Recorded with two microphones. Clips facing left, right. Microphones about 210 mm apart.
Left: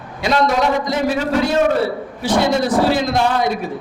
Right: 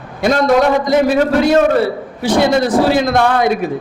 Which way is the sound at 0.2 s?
55° right (ahead or behind).